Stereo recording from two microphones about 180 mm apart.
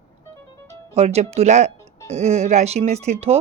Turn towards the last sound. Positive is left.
turn(degrees=-35)  # may be behind; listen again after turning